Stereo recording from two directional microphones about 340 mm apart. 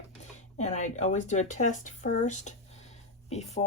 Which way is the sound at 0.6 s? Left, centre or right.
Centre.